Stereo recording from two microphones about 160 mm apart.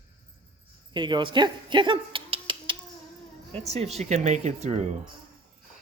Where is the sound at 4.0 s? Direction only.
45° right (ahead or behind).